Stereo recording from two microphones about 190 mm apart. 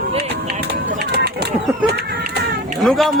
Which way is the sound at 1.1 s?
60° right (ahead or behind).